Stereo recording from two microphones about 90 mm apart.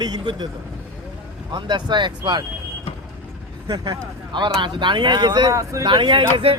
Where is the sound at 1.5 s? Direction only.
55° right (ahead or behind).